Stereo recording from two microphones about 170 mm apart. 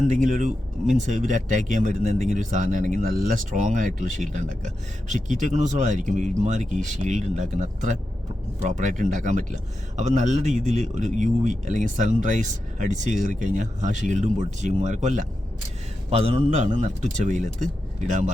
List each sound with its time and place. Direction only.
0.1 s speech: 45° right (ahead or behind)
16.0 s speech: 35° right (ahead or behind)